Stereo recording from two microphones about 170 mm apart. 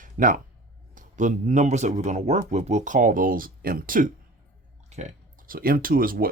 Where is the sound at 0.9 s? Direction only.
50° right (ahead or behind).